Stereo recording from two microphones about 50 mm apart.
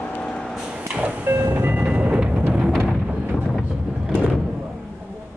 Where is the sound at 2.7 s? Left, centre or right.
Centre.